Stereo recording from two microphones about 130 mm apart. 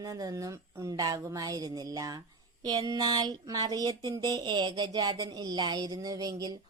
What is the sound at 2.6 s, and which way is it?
Speech, 30° right (ahead or behind).